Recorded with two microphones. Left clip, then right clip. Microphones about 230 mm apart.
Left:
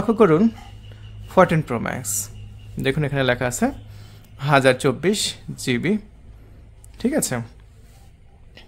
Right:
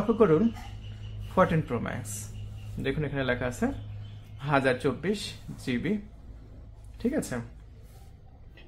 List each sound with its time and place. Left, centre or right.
0.1 s speech: left
7.0 s speech: left